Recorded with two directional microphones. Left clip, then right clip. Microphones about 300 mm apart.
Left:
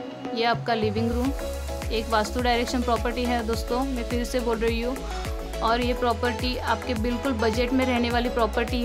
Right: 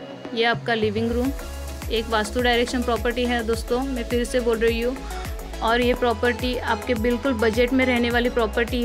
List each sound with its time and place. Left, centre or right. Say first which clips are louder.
0.3 s speech: right 2 dB; centre